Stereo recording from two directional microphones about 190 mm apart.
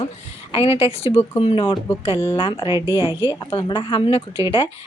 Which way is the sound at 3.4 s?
25° left (ahead or behind).